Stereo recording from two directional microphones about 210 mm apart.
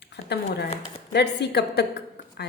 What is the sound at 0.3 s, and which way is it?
A woman's voice, 50° left (ahead or behind).